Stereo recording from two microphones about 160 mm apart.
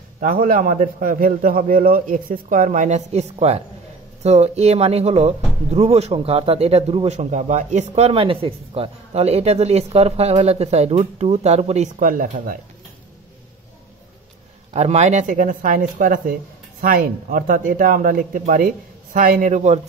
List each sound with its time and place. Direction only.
0.2 s a man's voice: 60° right (ahead or behind)
14.7 s a man's voice: 45° right (ahead or behind)